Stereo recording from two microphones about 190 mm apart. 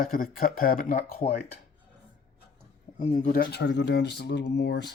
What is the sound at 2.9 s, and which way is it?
Speech, 45° left (ahead or behind).